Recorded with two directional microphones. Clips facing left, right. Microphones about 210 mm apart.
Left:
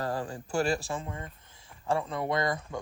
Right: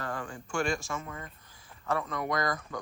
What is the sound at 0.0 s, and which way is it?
A man's voice, 35° left (ahead or behind).